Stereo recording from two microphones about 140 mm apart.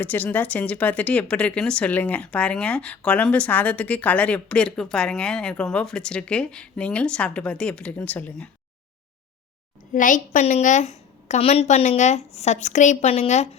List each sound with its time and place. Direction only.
0.0 s speech: 10° left (ahead or behind)
9.9 s a woman's voice: 70° left (ahead or behind); by 13.5 s 55° left (ahead or behind)